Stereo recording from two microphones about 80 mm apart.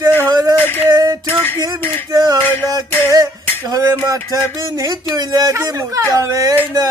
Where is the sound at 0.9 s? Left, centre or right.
Right.